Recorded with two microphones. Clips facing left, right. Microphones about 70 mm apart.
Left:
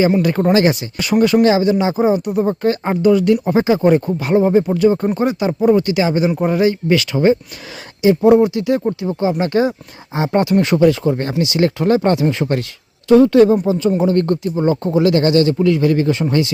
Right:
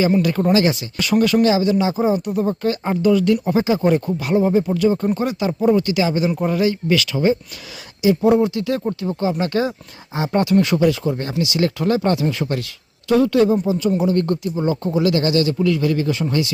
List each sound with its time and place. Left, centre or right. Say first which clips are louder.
0.3 s a man's voice: left 3 dB; left
10.8 s a man's voice: left 5 dB; left